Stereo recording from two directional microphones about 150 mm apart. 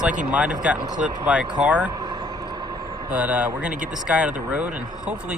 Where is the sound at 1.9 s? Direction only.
25° right (ahead or behind).